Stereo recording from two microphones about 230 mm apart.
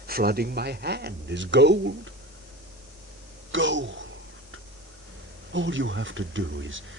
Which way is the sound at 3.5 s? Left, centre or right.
Right.